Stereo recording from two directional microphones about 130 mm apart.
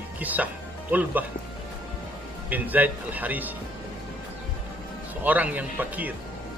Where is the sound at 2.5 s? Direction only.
15° right (ahead or behind).